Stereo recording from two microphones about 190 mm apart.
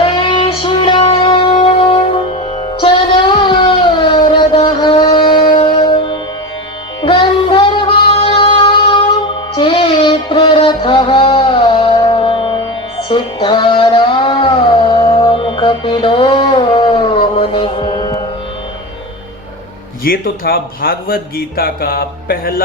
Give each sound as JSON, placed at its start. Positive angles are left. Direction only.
{"t": 0.0, "sound": "music", "side_deg": 25}
{"t": 2.8, "sound": "child singing", "side_deg": 25}
{"t": 5.5, "sound": "music", "side_deg": 30}
{"t": 7.0, "sound": "child singing", "side_deg": 25}
{"t": 13.1, "sound": "music", "side_deg": 25}
{"t": 20.1, "sound": "speech", "side_deg": 50}